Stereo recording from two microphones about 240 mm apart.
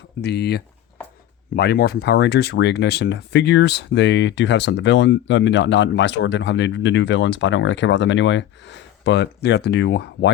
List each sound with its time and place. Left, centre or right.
0.2 s speech: left